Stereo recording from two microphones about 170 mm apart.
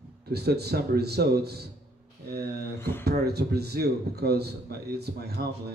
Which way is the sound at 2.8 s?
15° left (ahead or behind).